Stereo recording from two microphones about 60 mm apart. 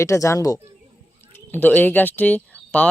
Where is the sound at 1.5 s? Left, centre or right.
Left.